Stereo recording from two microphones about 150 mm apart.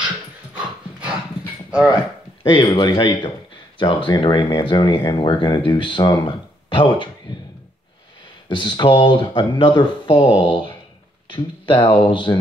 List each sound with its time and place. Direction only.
1.0 s dog: 5° right (ahead or behind)
2.4 s speech: 30° left (ahead or behind)
8.5 s speech: 30° left (ahead or behind)